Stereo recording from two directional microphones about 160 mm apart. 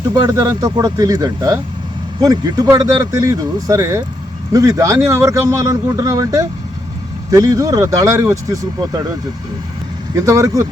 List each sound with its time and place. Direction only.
0.1 s speech: 25° right (ahead or behind)
10.2 s speech: 20° right (ahead or behind)